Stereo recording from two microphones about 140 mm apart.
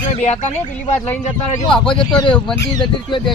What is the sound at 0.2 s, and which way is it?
Speech, 55° left (ahead or behind).